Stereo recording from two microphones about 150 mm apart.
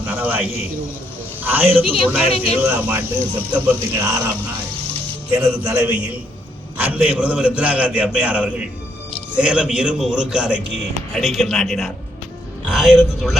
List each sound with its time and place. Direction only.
0.0 s a man's voice: 10° right (ahead or behind)
1.8 s speech: 35° left (ahead or behind)
2.6 s a man's voice: 10° right (ahead or behind)
5.4 s a man's voice: 15° right (ahead or behind)